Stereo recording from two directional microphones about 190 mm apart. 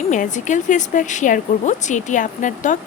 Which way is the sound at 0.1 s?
40° left (ahead or behind).